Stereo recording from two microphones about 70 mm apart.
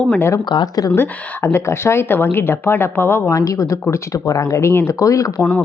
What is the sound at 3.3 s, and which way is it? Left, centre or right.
Speech, left.